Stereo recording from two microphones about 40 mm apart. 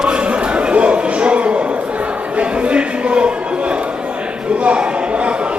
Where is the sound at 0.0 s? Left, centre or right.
Right.